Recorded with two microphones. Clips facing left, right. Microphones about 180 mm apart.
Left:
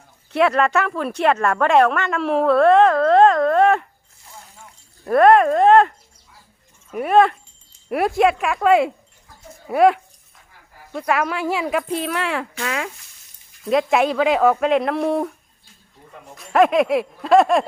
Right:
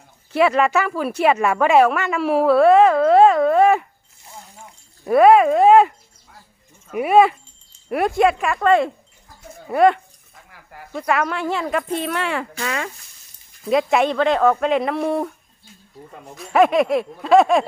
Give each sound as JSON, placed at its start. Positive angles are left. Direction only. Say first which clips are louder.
{"t": 0.3, "sound": "a woman's voice", "louder": "right 1 dB", "side_deg": 0}
{"t": 5.0, "sound": "speech", "louder": "right 1 dB", "side_deg": -5}
{"t": 6.9, "sound": "speech", "louder": "right 1 dB", "side_deg": -10}
{"t": 10.5, "sound": "a sound", "louder": "right 7 dB", "side_deg": -70}
{"t": 10.9, "sound": "speech", "louder": "even", "side_deg": 0}
{"t": 16.3, "sound": "speech", "louder": "even", "side_deg": 0}